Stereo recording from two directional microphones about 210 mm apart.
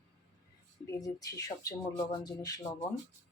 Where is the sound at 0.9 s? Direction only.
15° left (ahead or behind).